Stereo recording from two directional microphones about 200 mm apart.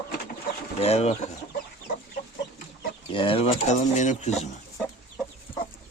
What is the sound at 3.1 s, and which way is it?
Speech, 25° left (ahead or behind).